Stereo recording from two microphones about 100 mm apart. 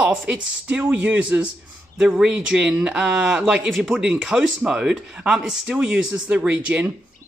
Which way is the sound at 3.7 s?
Centre (ahead or behind).